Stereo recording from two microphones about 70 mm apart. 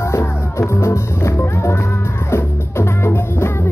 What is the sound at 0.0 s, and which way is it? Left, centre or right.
Music, left.